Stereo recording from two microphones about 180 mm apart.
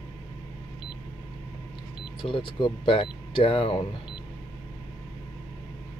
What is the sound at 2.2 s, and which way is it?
Speech, 25° left (ahead or behind).